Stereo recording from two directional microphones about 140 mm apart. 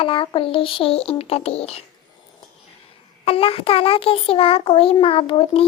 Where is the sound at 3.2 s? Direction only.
40° left (ahead or behind).